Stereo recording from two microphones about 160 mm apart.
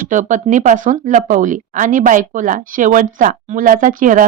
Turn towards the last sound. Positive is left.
turn(degrees=-55)  # may be behind; listen again after turning